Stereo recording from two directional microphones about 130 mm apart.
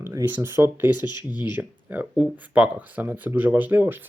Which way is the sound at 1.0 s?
35° left (ahead or behind).